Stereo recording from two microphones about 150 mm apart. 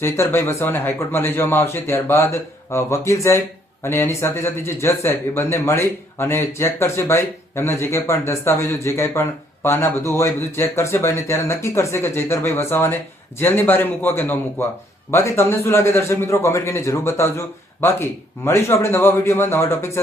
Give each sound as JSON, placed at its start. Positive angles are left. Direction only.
{"t": 0.0, "sound": "a man's voice", "side_deg": 15}